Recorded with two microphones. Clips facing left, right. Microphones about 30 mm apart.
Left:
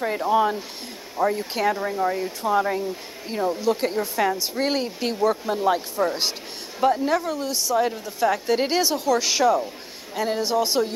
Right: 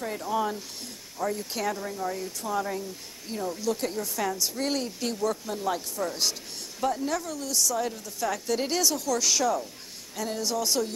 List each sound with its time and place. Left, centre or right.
0.0 s a woman's voice: left